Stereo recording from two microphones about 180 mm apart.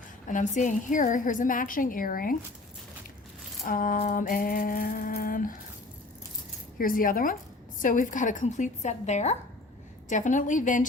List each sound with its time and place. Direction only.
0.3 s a woman's voice: 45° left (ahead or behind)
3.6 s a woman's voice: 50° left (ahead or behind)
6.7 s a woman's voice: 50° left (ahead or behind)